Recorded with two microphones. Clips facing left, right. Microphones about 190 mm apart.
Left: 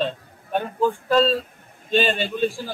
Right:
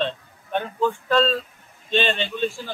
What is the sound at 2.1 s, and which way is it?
Speech, 45° left (ahead or behind).